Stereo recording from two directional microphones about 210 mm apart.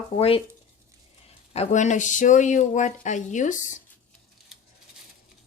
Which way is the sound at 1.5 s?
30° left (ahead or behind).